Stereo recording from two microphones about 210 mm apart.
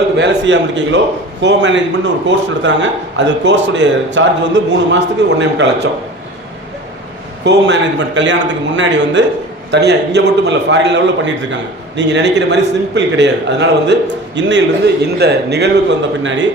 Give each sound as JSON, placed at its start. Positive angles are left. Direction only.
{"t": 0.2, "sound": "a man's voice", "side_deg": -60}
{"t": 7.4, "sound": "a man's voice", "side_deg": -55}
{"t": 16.2, "sound": "a man's voice", "side_deg": -60}